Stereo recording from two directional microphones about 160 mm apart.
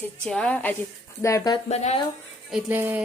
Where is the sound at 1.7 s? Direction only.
45° left (ahead or behind).